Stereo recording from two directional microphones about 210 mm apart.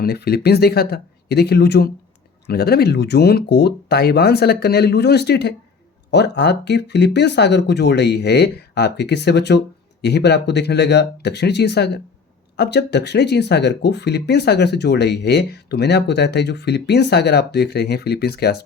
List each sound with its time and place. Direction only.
0.0 s speech: 50° left (ahead or behind)